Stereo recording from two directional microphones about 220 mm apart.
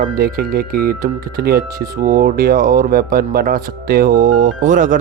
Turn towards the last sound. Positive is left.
turn(degrees=-35)  # may be behind; listen again after turning